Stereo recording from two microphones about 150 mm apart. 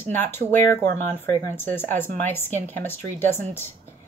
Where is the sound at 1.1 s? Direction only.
15° left (ahead or behind).